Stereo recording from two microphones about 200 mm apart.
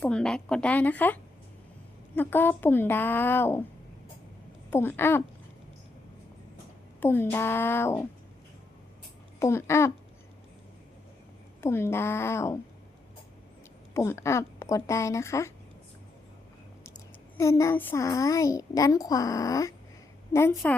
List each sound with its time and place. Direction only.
0.0 s a child's voice: 5° left (ahead or behind)
4.7 s a child's voice: 10° left (ahead or behind)
7.0 s a child's voice: 10° left (ahead or behind)
9.4 s a child's voice: 15° left (ahead or behind)
11.6 s a child's voice: 10° left (ahead or behind)
13.9 s a child's voice: 15° left (ahead or behind)
17.3 s a child's voice: 15° left (ahead or behind)